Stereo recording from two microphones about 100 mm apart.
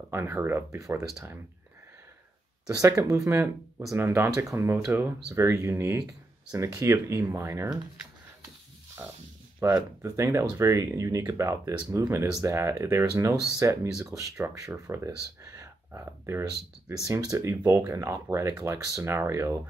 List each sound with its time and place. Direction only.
0.1 s speech: 25° right (ahead or behind)
2.6 s speech: 35° right (ahead or behind)
9.6 s speech: 30° right (ahead or behind)
15.9 s speech: 25° right (ahead or behind)